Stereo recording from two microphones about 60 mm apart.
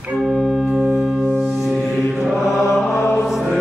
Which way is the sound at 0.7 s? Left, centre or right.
Centre.